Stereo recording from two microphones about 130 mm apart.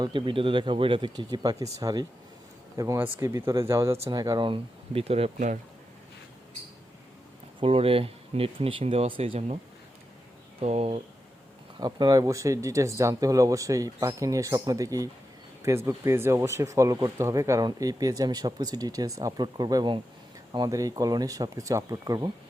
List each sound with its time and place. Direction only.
0.0 s speech: 40° right (ahead or behind)
7.6 s speech: 45° right (ahead or behind)
10.6 s speech: 55° right (ahead or behind)
11.8 s speech: 35° right (ahead or behind)